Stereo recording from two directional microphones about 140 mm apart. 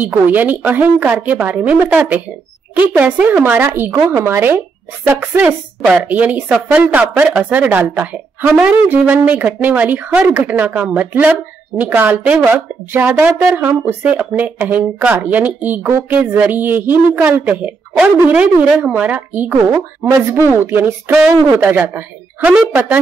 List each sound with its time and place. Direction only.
0.0 s speech: 15° right (ahead or behind)